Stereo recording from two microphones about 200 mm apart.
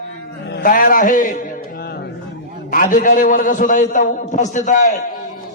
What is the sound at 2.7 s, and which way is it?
A man's voice, 40° left (ahead or behind).